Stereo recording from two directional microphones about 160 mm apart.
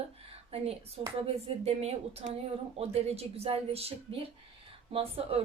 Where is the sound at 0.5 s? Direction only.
40° right (ahead or behind).